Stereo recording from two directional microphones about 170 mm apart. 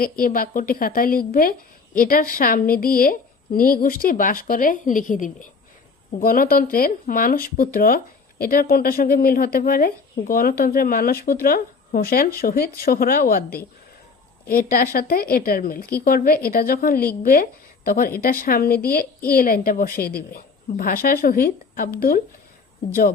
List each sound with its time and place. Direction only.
0.0 s speech: 55° left (ahead or behind)